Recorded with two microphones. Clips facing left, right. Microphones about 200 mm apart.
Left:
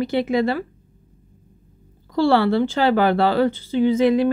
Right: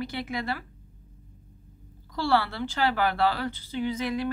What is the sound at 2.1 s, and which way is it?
Speech, 25° left (ahead or behind).